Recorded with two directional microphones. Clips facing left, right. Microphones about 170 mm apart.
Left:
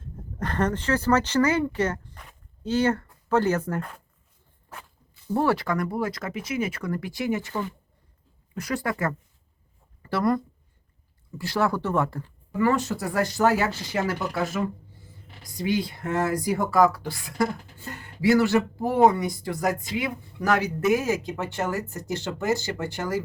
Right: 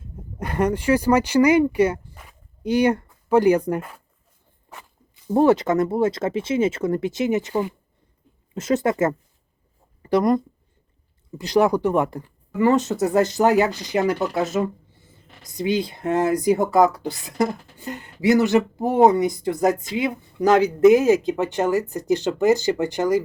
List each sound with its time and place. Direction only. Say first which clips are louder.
0.0 s speech: even; 10° right (ahead or behind)
5.1 s speech: right 7 dB; 20° right (ahead or behind)